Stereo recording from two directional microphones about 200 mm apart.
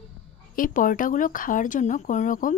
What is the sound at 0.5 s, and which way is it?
A woman's voice, 40° left (ahead or behind).